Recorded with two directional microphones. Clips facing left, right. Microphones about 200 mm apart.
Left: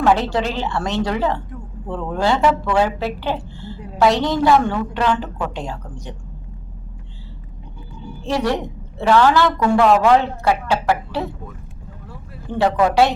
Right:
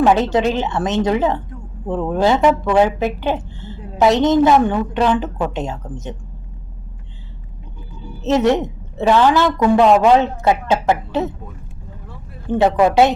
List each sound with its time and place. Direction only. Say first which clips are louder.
0.0 s a woman's voice: right 3 dB; 20° right (ahead or behind)
8.2 s a woman's voice: right 6 dB; 20° right (ahead or behind)
12.5 s a woman's voice: right 3 dB; 20° right (ahead or behind)